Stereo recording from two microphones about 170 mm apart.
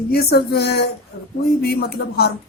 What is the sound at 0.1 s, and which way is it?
Speech, 70° left (ahead or behind).